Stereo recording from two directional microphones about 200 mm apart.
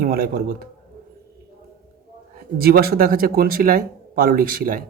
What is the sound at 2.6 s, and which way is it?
Speech, 50° right (ahead or behind).